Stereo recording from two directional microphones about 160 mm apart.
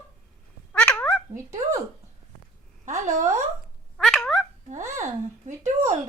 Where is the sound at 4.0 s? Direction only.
5° left (ahead or behind).